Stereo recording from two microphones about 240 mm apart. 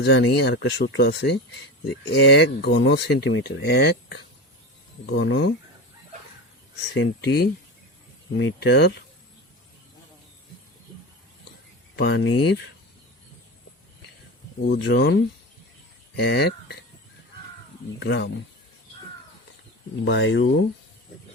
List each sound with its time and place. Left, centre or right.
0.0 s speech: left
6.9 s speech: left
11.9 s speech: left
14.8 s speech: left
18.0 s speech: left
20.1 s speech: left